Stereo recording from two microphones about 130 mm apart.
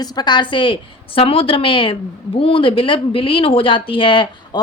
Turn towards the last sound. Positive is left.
turn(degrees=40)  # may be behind; listen again after turning